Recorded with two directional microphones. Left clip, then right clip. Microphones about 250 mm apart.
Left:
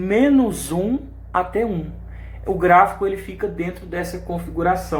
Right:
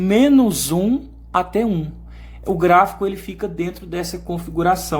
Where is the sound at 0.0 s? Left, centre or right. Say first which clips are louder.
Right 2 dB; right.